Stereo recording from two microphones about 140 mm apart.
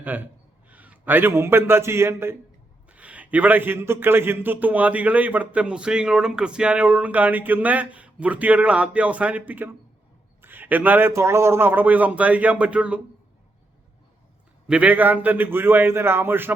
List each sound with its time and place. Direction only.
0.0 s a man's voice: 10° right (ahead or behind)
14.7 s a man's voice: 10° right (ahead or behind)